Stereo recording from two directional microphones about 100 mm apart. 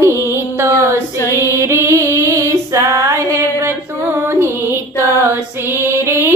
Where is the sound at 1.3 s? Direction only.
25° right (ahead or behind).